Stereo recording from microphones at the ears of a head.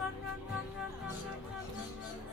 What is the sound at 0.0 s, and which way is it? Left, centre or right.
Vehicle, left.